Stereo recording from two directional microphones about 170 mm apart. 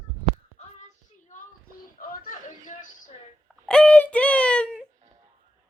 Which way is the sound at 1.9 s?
55° left (ahead or behind).